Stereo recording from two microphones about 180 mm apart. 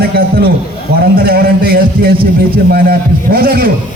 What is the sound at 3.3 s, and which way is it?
Speech, 55° right (ahead or behind).